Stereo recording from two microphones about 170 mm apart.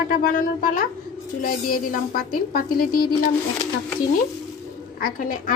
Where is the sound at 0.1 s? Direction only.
55° left (ahead or behind).